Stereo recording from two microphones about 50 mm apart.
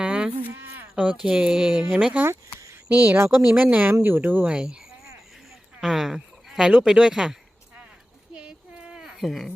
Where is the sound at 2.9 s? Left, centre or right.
Right.